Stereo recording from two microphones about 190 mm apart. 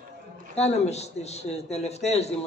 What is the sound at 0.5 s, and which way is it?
Mantra, 35° left (ahead or behind).